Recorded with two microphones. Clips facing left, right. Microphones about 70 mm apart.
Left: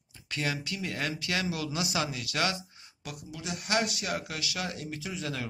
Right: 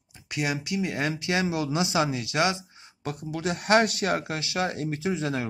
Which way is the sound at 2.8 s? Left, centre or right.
Right.